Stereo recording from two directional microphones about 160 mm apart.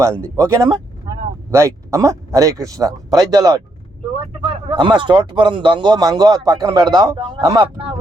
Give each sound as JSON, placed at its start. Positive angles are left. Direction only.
{"t": 0.3, "sound": "speech", "side_deg": -20}
{"t": 4.1, "sound": "vehicle", "side_deg": -35}
{"t": 4.8, "sound": "speech", "side_deg": -30}